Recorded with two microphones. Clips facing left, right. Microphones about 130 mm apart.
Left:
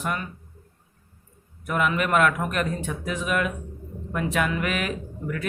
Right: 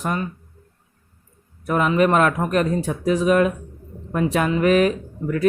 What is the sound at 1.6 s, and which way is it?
A man's voice, 35° right (ahead or behind).